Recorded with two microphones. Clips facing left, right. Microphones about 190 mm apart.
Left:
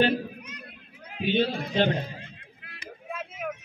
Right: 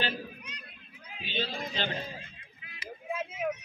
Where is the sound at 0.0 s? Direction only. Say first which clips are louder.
Left 11 dB; 55° left (ahead or behind).